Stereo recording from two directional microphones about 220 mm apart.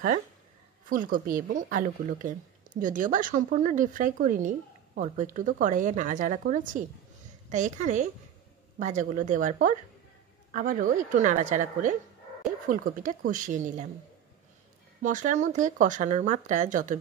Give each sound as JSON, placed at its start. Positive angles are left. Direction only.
{"t": 0.8, "sound": "speech", "side_deg": -40}
{"t": 15.0, "sound": "speech", "side_deg": -35}